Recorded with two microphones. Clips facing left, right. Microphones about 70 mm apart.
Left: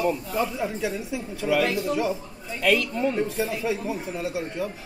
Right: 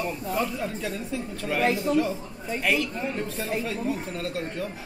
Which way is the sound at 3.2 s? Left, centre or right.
Centre.